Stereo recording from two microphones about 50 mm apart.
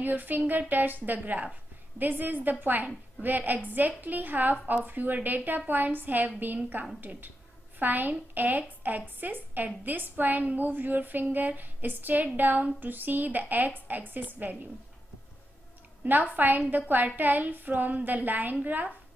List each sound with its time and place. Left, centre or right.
0.0 s a woman's voice: right
16.0 s a woman's voice: right